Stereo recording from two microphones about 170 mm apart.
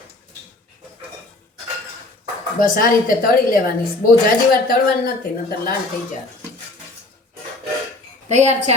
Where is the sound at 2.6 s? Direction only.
55° left (ahead or behind).